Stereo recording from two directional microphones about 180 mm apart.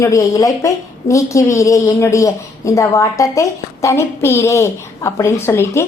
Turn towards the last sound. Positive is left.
turn(degrees=15)  # may be behind; listen again after turning